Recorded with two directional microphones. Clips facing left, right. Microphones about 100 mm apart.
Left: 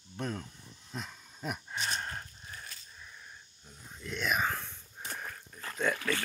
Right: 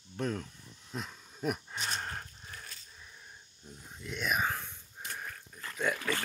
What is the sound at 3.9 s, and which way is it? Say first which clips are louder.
Speech: left 1 dB; 10° right (ahead or behind).